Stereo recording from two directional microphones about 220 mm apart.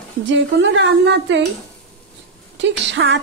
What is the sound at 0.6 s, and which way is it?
Speech, 55° right (ahead or behind).